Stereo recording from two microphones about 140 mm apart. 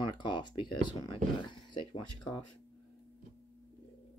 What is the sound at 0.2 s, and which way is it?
Speech, 35° left (ahead or behind).